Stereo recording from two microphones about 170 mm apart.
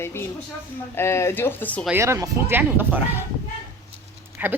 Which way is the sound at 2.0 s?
15° right (ahead or behind).